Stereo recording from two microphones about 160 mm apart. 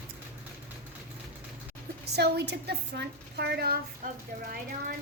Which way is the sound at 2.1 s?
90° right.